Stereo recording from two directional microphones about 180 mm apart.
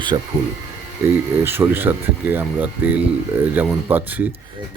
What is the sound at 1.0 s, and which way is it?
Speech, 10° right (ahead or behind).